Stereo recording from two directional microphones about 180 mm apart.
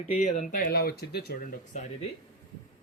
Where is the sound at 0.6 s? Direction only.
60° left (ahead or behind).